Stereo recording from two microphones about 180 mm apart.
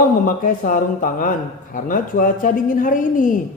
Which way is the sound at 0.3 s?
50° left (ahead or behind).